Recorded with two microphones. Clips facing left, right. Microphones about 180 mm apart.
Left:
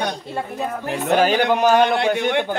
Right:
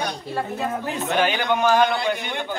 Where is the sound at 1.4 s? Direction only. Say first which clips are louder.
Left 3 dB; 70° left (ahead or behind).